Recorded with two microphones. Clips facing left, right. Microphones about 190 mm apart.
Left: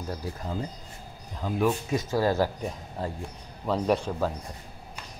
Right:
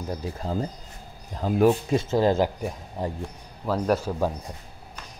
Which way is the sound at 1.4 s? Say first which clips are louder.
Right 6 dB; 40° right (ahead or behind).